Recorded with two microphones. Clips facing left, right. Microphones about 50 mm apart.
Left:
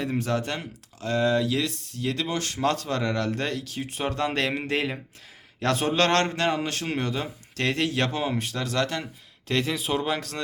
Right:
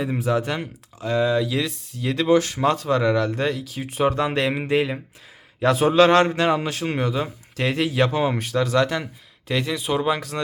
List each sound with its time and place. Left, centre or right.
0.0 s a man's voice: centre
9.5 s speech: centre